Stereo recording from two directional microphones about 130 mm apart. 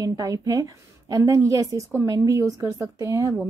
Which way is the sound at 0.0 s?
25° right (ahead or behind).